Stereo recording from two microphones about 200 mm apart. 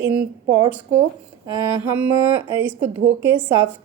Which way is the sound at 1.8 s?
10° right (ahead or behind).